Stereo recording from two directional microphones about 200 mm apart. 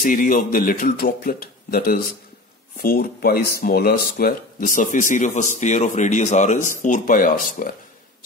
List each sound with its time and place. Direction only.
0.0 s a man's voice: 45° left (ahead or behind)